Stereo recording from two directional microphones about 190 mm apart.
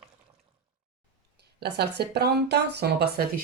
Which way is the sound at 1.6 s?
60° right (ahead or behind).